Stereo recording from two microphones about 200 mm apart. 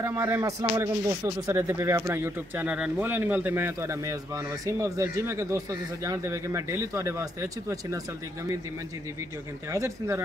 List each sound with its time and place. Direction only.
0.0 s speech: 15° right (ahead or behind)
9.7 s speech: 15° right (ahead or behind)